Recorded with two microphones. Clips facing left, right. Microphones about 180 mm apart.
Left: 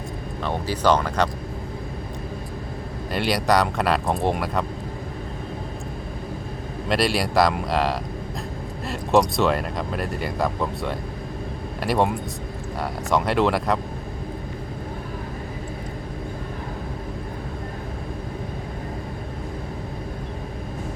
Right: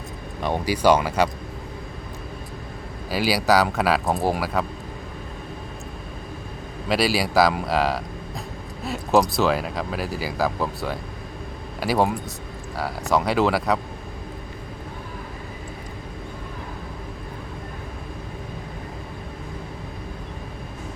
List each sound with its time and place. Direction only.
0.4 s speech: 15° right (ahead or behind)
3.1 s speech: 5° right (ahead or behind)
6.8 s speech: centre (ahead or behind)